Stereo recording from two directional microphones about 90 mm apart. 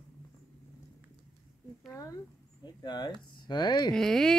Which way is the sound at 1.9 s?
40° left (ahead or behind).